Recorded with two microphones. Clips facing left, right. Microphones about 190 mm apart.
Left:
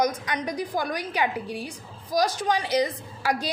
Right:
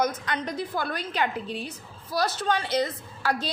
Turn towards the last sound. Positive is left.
turn(degrees=10)  # may be behind; listen again after turning